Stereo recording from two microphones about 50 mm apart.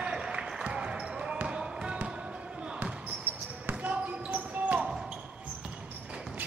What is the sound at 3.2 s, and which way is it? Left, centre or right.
Basketball bounce, right.